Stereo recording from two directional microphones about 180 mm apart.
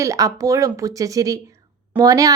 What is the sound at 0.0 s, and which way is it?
A woman's voice, 20° right (ahead or behind).